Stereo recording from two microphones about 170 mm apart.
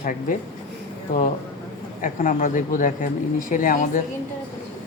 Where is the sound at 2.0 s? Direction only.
50° left (ahead or behind).